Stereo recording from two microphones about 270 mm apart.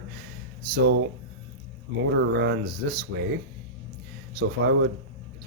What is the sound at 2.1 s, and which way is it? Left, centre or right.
Speech, right.